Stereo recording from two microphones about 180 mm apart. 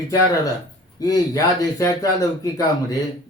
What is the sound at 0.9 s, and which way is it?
Speech, 20° left (ahead or behind).